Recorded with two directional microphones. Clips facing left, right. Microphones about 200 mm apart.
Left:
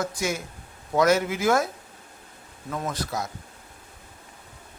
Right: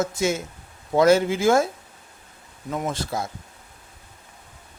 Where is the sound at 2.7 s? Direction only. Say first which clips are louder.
Right 3 dB; 25° right (ahead or behind).